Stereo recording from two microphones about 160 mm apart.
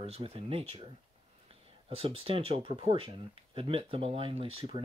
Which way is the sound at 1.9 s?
35° right (ahead or behind).